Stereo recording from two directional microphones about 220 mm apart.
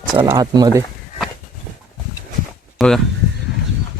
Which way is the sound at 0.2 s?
20° right (ahead or behind).